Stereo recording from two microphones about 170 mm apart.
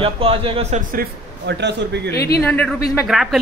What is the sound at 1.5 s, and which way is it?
Speech, 90° right.